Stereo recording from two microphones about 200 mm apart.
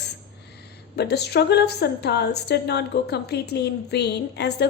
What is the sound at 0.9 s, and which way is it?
A woman's voice, 55° left (ahead or behind).